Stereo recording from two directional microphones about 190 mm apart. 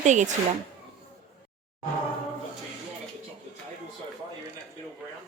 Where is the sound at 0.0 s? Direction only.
40° right (ahead or behind).